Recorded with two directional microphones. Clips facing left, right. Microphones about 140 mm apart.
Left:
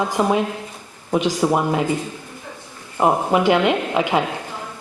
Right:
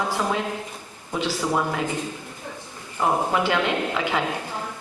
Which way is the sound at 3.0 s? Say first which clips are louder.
Left 5 dB; 20° left (ahead or behind).